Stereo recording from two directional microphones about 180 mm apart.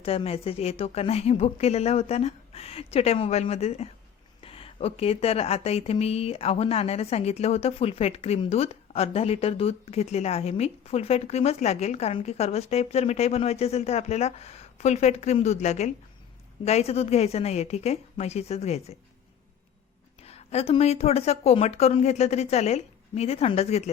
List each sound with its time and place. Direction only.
0.0 s speech: 30° left (ahead or behind)
20.2 s speech: 35° left (ahead or behind)